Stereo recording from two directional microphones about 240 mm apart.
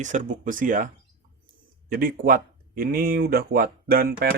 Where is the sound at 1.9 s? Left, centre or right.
Right.